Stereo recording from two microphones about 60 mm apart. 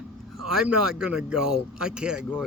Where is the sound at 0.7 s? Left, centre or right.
Centre.